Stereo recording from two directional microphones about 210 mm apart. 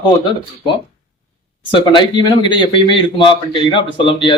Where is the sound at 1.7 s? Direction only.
20° left (ahead or behind).